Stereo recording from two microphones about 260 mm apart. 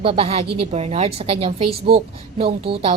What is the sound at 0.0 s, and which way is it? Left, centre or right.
Speech, right.